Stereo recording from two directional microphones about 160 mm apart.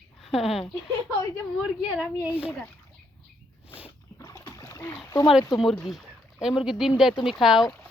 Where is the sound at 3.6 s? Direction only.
10° right (ahead or behind).